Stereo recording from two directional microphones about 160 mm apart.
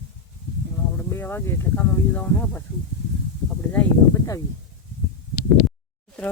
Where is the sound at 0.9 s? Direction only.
15° left (ahead or behind).